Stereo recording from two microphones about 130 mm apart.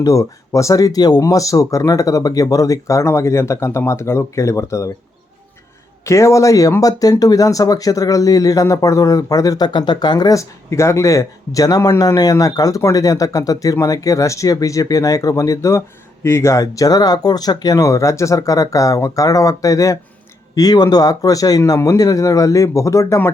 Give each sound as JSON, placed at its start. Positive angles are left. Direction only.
{"t": 0.0, "sound": "speech", "side_deg": 25}
{"t": 6.1, "sound": "speech", "side_deg": 25}